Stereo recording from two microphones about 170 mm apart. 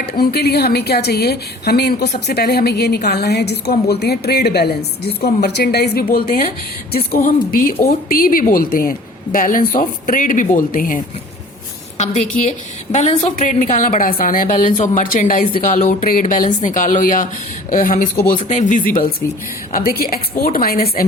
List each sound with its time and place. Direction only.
0.2 s a woman's voice: 70° left (ahead or behind)
11.9 s a woman's voice: 45° left (ahead or behind); by 21.0 s 60° left (ahead or behind)